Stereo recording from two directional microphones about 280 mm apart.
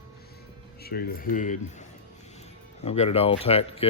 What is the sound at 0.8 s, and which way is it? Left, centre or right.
Speech, left.